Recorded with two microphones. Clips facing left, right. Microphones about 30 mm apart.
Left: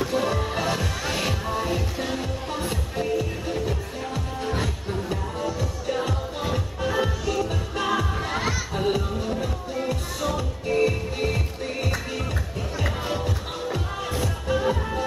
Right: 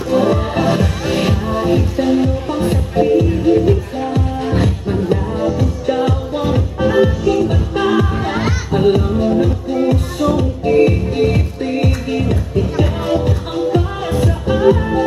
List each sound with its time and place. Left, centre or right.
0.1 s music: right
6.4 s music: right
14.2 s music: right